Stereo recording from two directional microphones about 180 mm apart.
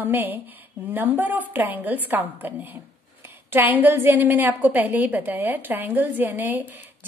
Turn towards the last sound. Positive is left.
turn(degrees=-10)  # may be behind; listen again after turning